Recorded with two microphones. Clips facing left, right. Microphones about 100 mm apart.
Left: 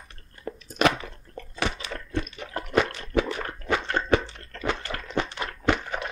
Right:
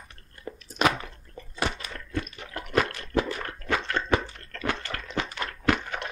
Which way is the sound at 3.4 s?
30° left (ahead or behind).